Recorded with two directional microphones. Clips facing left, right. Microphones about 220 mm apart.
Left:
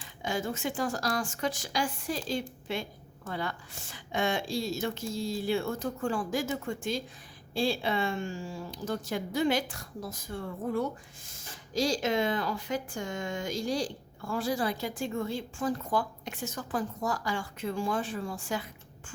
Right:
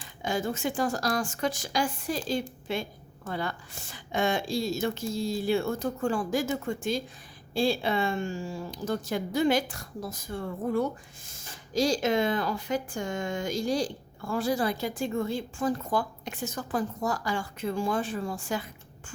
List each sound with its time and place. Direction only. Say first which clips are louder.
0.2 s a woman's voice: right 3 dB; 40° right (ahead or behind)